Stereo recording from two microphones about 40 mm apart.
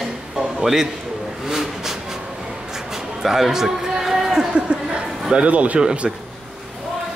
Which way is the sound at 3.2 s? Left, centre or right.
Centre.